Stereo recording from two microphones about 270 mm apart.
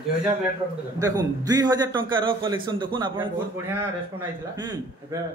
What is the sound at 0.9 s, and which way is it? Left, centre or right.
A man's voice, centre.